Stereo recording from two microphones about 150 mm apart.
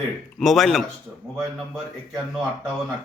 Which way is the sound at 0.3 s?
Centre (ahead or behind).